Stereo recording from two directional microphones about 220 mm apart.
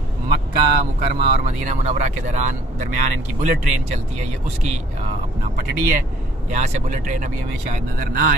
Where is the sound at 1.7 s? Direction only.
30° right (ahead or behind).